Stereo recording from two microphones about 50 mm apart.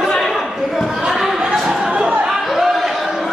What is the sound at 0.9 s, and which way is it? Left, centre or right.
Chatter, centre.